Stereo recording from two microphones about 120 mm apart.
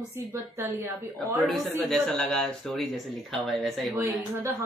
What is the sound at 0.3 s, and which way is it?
Speech, 20° right (ahead or behind).